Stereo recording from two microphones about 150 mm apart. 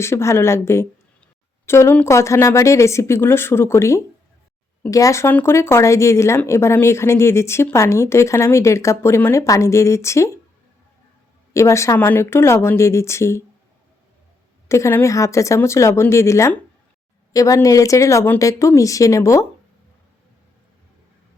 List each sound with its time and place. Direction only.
0.0 s speech: 15° left (ahead or behind)
11.5 s speech: 20° left (ahead or behind)
14.7 s speech: 15° left (ahead or behind)